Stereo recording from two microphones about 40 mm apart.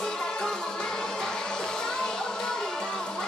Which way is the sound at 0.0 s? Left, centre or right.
Centre.